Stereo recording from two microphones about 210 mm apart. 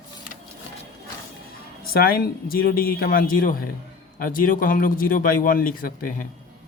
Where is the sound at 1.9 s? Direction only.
45° left (ahead or behind).